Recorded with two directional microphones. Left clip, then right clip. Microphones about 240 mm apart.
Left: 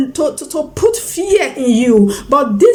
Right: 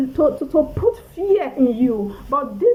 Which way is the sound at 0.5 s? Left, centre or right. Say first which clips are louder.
Left 3 dB; centre.